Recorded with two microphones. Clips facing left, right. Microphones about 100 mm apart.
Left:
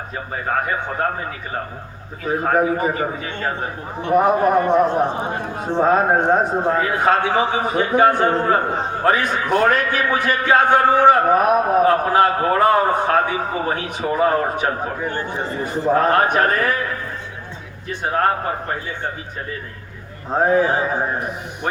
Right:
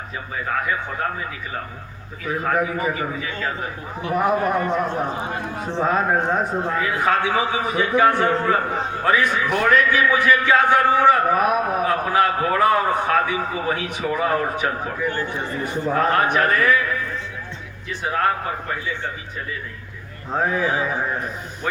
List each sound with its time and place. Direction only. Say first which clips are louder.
0.3 s a man's voice: left 2 dB; 40° left (ahead or behind); by 5.7 s 25° left (ahead or behind)
5.7 s a man's voice: left 5 dB; 45° left (ahead or behind)
6.4 s speech: left 3 dB; 25° left (ahead or behind)
6.7 s a man's voice: left 4 dB; 40° left (ahead or behind)
7.0 s a man's voice: left 2 dB; 50° left (ahead or behind)
7.3 s speech: left 3 dB; 25° left (ahead or behind)
7.7 s a man's voice: left 1 dB; 40° left (ahead or behind)
15.1 s speech: left 1 dB; 20° left (ahead or behind)
15.4 s a man's voice: left 2 dB; 30° left (ahead or behind)